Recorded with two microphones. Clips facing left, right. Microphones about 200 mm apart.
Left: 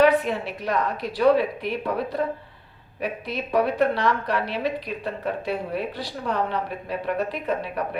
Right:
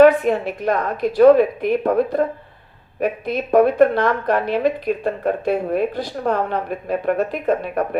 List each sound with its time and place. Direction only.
0.0 s a woman's voice: 50° right (ahead or behind)